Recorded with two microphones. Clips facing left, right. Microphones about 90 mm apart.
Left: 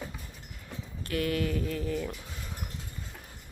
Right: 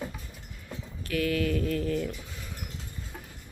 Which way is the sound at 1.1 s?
30° left (ahead or behind).